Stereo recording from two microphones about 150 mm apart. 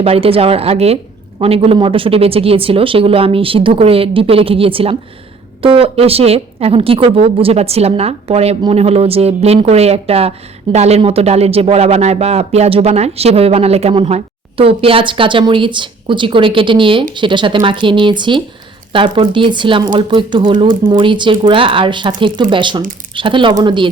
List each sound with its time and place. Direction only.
0.0 s speech: 40° right (ahead or behind)